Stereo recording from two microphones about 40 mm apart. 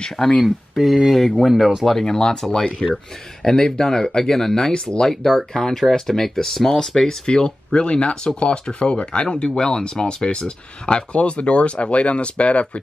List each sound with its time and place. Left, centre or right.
0.4 s speech: centre; by 12.8 s left